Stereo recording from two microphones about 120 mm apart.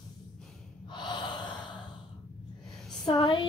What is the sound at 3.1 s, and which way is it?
Speech, 40° left (ahead or behind).